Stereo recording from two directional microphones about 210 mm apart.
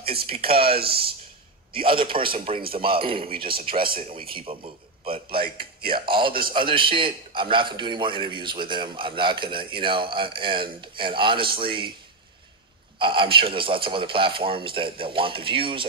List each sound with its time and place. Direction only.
0.0 s a sound: 45° right (ahead or behind)
0.3 s a man's voice: 25° right (ahead or behind)
0.7 s speech: 45° right (ahead or behind)
1.8 s a man's voice: 25° right (ahead or behind)
4.5 s a man's voice: 25° right (ahead or behind)
13.0 s a man's voice: 25° right (ahead or behind)